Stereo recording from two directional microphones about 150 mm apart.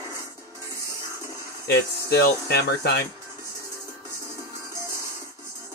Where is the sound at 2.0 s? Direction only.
90° left.